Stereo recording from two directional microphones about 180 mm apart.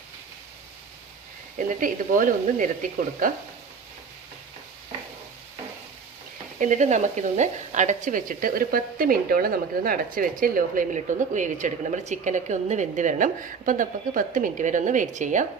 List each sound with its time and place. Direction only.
1.5 s speech: 50° right (ahead or behind)
6.6 s speech: 40° right (ahead or behind)